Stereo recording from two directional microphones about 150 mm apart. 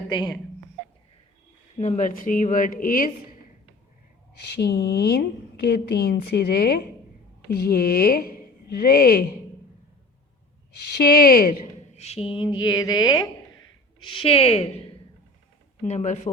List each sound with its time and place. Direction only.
0.1 s speech: 30° left (ahead or behind)
1.8 s speech: 55° left (ahead or behind)
4.5 s a woman's voice: 90° left
10.9 s speech: 85° left
11.6 s speech: 45° left (ahead or behind); by 13.3 s 25° left (ahead or behind)
14.2 s a woman's voice: 40° left (ahead or behind)
15.9 s speech: 50° left (ahead or behind)